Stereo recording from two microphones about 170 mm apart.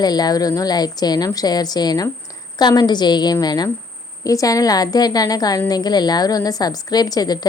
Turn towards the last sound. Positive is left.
turn(degrees=25)  # may be behind; listen again after turning